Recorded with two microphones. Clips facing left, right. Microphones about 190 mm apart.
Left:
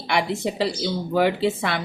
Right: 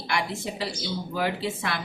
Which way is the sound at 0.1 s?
65° left (ahead or behind).